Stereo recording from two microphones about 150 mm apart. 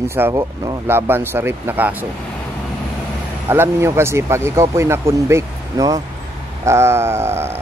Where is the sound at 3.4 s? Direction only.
15° right (ahead or behind).